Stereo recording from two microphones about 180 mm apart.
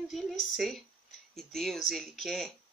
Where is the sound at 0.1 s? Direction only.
Centre (ahead or behind).